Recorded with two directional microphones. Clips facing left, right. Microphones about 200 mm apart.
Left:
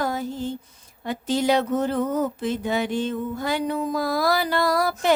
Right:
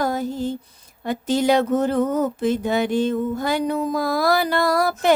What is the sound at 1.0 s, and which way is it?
Speech, 45° right (ahead or behind).